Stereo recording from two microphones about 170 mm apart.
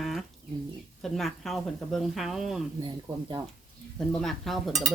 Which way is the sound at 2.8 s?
30° right (ahead or behind).